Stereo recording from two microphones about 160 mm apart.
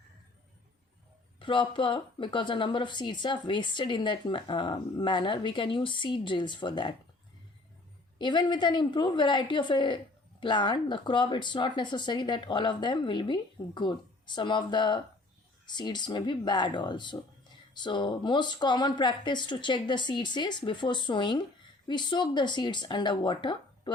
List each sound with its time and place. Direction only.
1.4 s speech: 30° left (ahead or behind)
8.2 s speech: 30° left (ahead or behind)